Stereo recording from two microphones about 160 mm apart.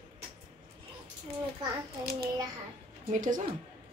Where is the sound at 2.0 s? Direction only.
75° right (ahead or behind).